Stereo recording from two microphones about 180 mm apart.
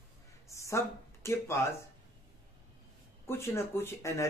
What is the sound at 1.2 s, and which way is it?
Speech, 15° left (ahead or behind).